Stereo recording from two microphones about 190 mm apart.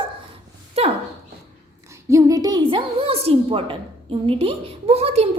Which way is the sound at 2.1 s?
15° right (ahead or behind).